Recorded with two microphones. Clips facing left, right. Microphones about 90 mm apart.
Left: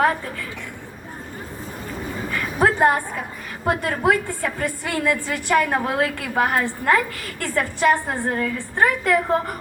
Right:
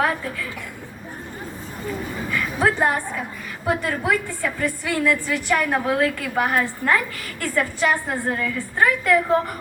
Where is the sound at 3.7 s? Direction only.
50° left (ahead or behind).